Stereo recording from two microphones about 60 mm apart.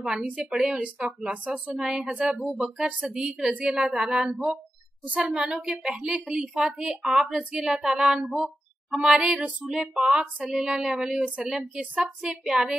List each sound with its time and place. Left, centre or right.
0.0 s a woman's voice: centre
5.0 s a woman's voice: right
12.3 s speech: centre